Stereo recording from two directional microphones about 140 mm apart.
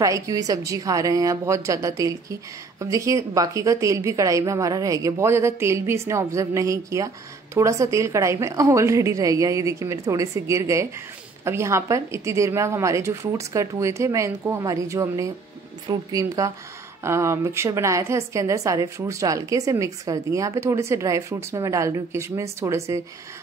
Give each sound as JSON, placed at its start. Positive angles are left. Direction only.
{"t": 0.0, "sound": "a woman's voice", "side_deg": -25}